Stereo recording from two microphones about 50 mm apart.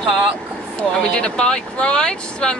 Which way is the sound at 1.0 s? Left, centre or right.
Centre.